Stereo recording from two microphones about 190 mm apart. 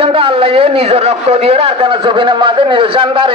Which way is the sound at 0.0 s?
30° right (ahead or behind).